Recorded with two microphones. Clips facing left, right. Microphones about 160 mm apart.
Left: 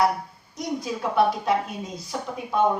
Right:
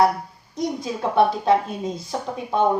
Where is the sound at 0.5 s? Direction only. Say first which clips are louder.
Right 3 dB; 25° right (ahead or behind).